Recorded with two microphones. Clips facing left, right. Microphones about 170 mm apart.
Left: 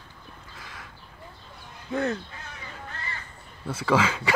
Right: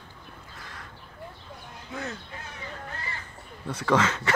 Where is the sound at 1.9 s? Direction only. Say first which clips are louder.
Left 9 dB; 60° left (ahead or behind).